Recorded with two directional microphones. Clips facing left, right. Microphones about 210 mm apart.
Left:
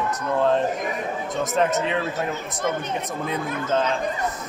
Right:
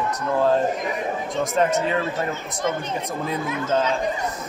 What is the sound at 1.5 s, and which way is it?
Speech, centre (ahead or behind).